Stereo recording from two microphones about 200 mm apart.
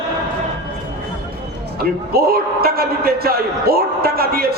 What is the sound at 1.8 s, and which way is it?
A man's voice, 50° right (ahead or behind).